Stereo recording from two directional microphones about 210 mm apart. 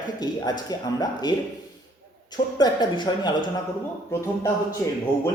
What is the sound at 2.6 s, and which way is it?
Speech, 20° left (ahead or behind).